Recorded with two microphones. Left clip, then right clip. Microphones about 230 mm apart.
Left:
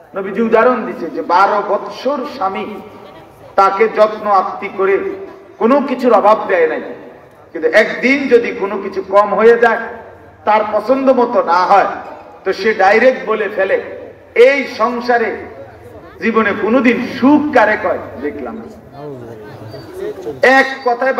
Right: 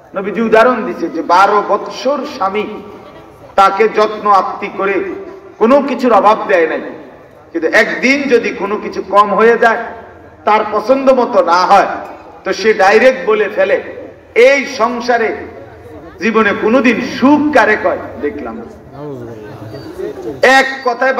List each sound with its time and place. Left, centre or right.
0.1 s a man's voice: right
20.3 s a man's voice: right